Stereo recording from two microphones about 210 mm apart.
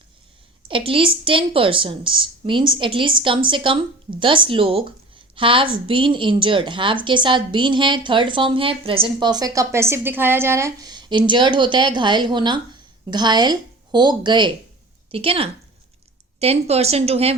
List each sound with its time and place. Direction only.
0.7 s a woman's voice: 25° right (ahead or behind)